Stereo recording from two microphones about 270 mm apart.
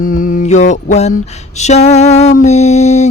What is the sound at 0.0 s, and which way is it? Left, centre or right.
Music, left.